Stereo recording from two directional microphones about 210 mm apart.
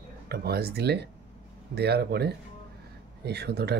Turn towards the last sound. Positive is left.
turn(degrees=-50)  # may be behind; listen again after turning